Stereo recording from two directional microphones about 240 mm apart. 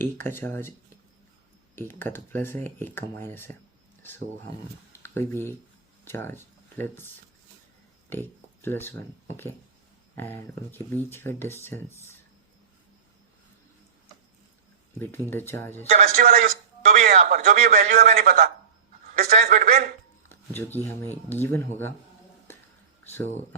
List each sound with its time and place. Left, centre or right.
0.0 s speech: centre
1.7 s speech: centre
4.9 s a sound: centre
6.1 s speech: centre
8.1 s speech: centre
14.9 s speech: centre
15.9 s speech: right
16.2 s a man's voice: right
16.8 s music: right
17.1 s a man's voice: right
20.2 s speech: centre
23.0 s speech: centre